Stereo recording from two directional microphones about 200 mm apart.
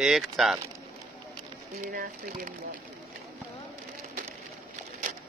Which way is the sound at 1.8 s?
45° right (ahead or behind).